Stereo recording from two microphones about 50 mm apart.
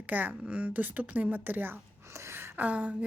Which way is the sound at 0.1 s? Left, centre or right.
Right.